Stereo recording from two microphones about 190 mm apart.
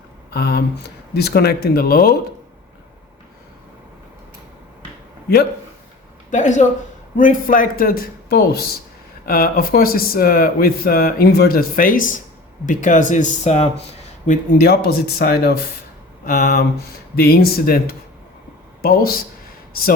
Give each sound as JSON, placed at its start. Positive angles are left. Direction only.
{"t": 0.3, "sound": "speech", "side_deg": 60}
{"t": 6.3, "sound": "speech", "side_deg": 40}
{"t": 14.3, "sound": "speech", "side_deg": 55}